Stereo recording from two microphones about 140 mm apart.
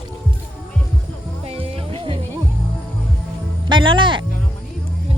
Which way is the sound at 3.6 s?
35° right (ahead or behind).